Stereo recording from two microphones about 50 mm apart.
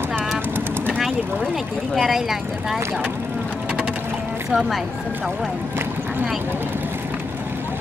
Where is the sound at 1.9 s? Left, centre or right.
Centre.